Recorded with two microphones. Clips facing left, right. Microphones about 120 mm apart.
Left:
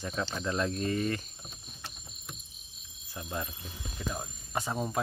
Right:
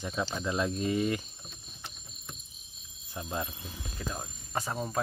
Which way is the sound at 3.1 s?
25° right (ahead or behind).